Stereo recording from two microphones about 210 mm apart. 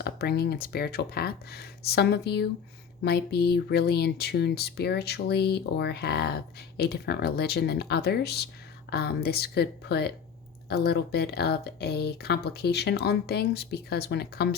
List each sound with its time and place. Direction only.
0.0 s speech: 50° left (ahead or behind)